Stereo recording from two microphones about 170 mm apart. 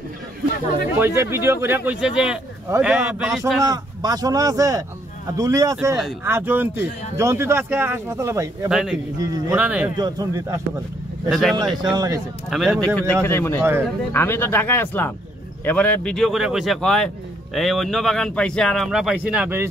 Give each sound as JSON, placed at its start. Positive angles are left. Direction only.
{"t": 0.9, "sound": "speech", "side_deg": -15}
{"t": 3.6, "sound": "speech", "side_deg": -25}
{"t": 8.6, "sound": "speech", "side_deg": -5}
{"t": 9.9, "sound": "speech", "side_deg": -20}
{"t": 11.2, "sound": "speech", "side_deg": 0}
{"t": 11.9, "sound": "speech", "side_deg": -20}
{"t": 12.4, "sound": "speech", "side_deg": 0}
{"t": 13.6, "sound": "speech", "side_deg": -15}
{"t": 14.1, "sound": "speech", "side_deg": 15}